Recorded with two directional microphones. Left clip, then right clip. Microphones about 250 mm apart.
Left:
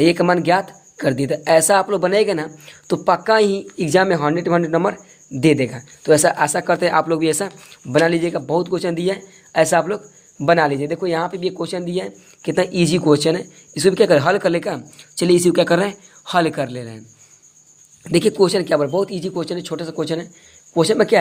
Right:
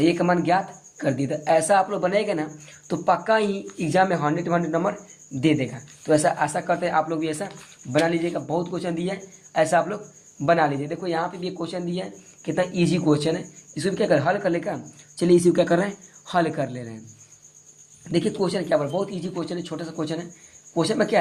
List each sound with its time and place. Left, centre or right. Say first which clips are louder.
0.0 s speech: left 6 dB; left
18.0 s speech: left 9 dB; left